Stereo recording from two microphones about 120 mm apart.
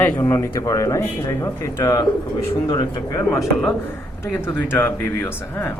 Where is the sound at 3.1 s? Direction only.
25° left (ahead or behind).